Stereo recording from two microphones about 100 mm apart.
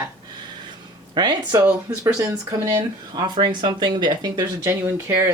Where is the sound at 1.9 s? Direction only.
30° right (ahead or behind).